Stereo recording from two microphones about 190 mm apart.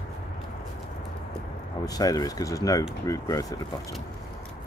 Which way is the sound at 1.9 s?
20° left (ahead or behind).